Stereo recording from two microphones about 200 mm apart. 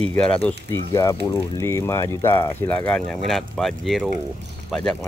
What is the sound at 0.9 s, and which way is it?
Speech, 15° left (ahead or behind).